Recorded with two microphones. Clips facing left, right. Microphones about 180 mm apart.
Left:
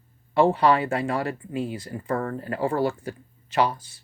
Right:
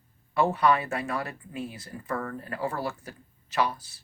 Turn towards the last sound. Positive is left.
turn(degrees=30)  # may be behind; listen again after turning